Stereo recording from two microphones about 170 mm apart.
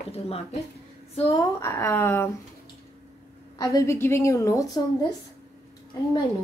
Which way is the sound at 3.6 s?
20° left (ahead or behind).